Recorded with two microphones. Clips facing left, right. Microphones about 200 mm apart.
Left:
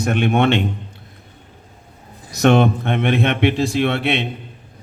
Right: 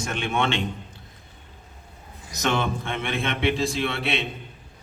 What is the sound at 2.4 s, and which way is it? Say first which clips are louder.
A man's voice: left 11 dB; 60° left (ahead or behind).